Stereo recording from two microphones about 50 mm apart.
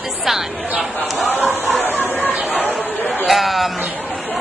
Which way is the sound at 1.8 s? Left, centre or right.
Left.